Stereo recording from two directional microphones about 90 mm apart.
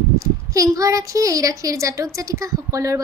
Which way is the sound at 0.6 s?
40° right (ahead or behind).